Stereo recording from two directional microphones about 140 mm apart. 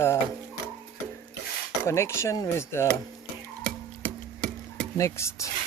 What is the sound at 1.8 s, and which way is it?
Speech, 20° left (ahead or behind).